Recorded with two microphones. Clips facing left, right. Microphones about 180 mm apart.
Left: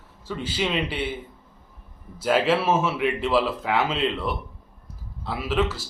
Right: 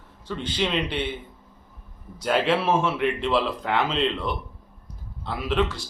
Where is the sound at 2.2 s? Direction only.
5° left (ahead or behind).